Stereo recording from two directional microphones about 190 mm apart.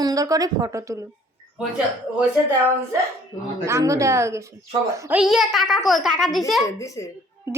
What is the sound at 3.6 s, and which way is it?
A child's voice, 15° right (ahead or behind).